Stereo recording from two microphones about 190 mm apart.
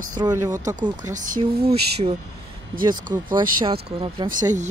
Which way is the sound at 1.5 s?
55° right (ahead or behind).